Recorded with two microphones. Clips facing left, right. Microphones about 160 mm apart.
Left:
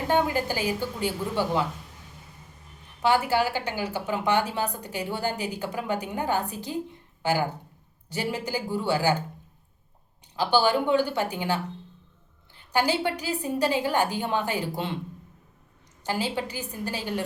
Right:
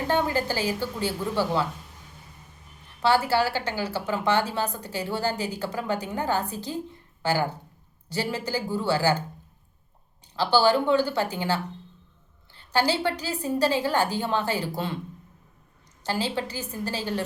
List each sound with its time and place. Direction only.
0.1 s a woman's voice: 15° left (ahead or behind)
3.0 s a woman's voice: 15° left (ahead or behind)
10.3 s a woman's voice: 15° left (ahead or behind)
16.0 s a woman's voice: 15° left (ahead or behind)